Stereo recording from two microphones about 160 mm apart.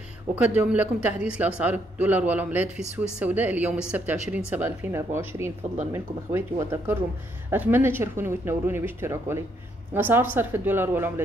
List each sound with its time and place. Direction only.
0.4 s speech: 10° right (ahead or behind)